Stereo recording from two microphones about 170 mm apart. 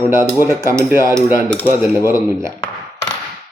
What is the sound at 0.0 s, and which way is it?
Speech, 15° right (ahead or behind).